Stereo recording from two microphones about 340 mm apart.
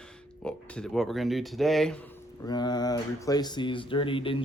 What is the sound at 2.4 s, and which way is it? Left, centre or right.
Speech, centre.